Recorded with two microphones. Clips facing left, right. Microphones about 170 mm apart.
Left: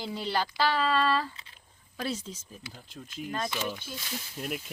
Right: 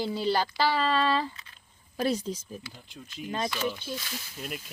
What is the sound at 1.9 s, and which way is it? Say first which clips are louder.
Speech: right 6 dB; 40° right (ahead or behind).